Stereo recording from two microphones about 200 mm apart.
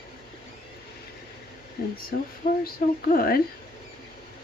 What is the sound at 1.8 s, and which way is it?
Speech, 50° left (ahead or behind).